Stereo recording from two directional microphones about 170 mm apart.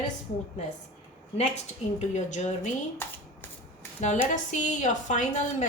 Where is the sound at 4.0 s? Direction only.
45° left (ahead or behind).